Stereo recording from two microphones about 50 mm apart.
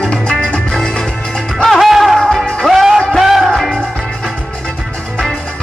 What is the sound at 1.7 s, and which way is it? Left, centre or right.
Music, centre.